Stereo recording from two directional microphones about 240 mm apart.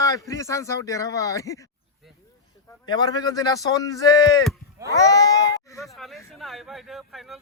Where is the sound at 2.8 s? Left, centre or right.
Centre.